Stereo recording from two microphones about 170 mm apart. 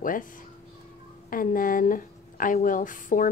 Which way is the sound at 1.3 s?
55° left (ahead or behind).